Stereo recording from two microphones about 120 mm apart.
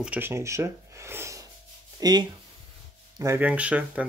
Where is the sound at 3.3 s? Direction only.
10° right (ahead or behind).